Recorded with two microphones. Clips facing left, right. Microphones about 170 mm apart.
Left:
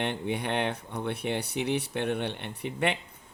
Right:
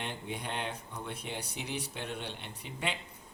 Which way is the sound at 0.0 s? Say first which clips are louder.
Left 9 dB; 65° left (ahead or behind).